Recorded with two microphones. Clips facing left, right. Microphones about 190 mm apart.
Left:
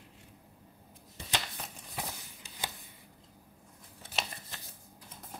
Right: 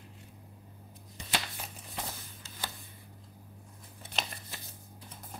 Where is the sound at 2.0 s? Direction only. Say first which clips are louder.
Even; 15° left (ahead or behind).